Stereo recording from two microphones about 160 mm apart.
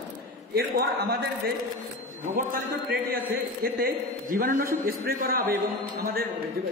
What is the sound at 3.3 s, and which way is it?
A man's voice, 70° right (ahead or behind).